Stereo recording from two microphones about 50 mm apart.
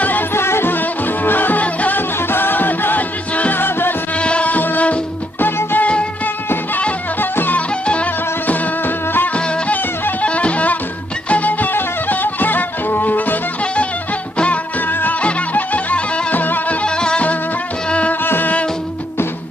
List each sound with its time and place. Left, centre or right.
0.3 s music: left
2.0 s music: left
4.2 s music: left
5.4 s music: left
7.8 s music: left
8.8 s music: left
9.3 s music: left
14.9 s music: left
15.2 s music: left
16.8 s music: centre
18.2 s music: left